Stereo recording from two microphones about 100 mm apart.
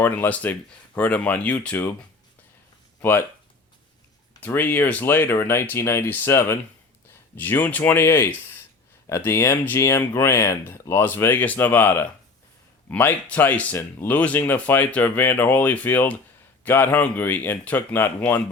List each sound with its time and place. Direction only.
0.0 s speech: 20° left (ahead or behind)
3.0 s speech: 20° left (ahead or behind)
4.4 s speech: 20° left (ahead or behind)